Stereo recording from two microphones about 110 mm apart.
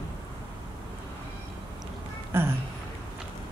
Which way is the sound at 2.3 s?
20° right (ahead or behind).